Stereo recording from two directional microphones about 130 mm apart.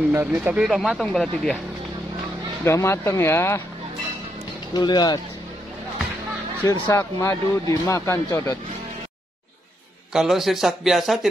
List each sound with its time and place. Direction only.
0.1 s a man's voice: 15° right (ahead or behind); by 1.6 s 5° left (ahead or behind)
2.6 s speech: 20° left (ahead or behind)
4.7 s speech: 30° left (ahead or behind)
6.6 s speech: 20° left (ahead or behind)
10.1 s a man's voice: 5° right (ahead or behind)